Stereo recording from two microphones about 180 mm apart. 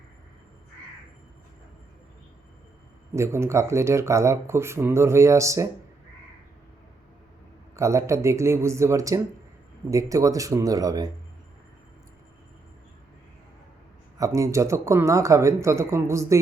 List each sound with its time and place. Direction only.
3.2 s speech: 15° right (ahead or behind)
7.8 s speech: 15° right (ahead or behind)
14.2 s speech: 15° right (ahead or behind)